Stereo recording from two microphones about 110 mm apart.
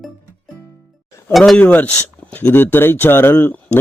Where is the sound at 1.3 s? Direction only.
Centre (ahead or behind).